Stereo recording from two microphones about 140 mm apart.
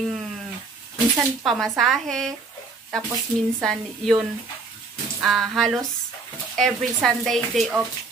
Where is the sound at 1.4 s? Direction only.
Centre (ahead or behind).